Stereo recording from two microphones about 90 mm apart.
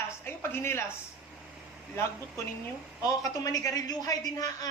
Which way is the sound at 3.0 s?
40° left (ahead or behind).